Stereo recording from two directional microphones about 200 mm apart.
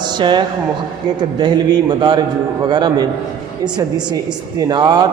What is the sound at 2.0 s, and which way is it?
A man's voice, 20° right (ahead or behind).